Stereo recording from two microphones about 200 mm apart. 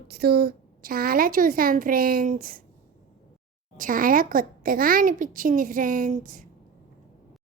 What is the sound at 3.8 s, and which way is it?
A woman's voice, 45° right (ahead or behind).